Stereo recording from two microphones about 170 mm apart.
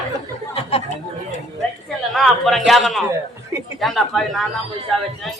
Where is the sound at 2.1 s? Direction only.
Centre (ahead or behind).